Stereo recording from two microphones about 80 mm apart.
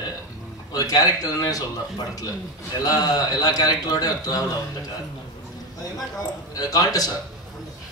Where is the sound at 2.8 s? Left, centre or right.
Left.